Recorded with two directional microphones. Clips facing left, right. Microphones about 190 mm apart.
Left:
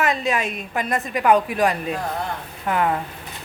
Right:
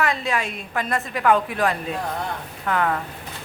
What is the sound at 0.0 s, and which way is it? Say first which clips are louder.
A woman's voice: left 2 dB; 20° left (ahead or behind).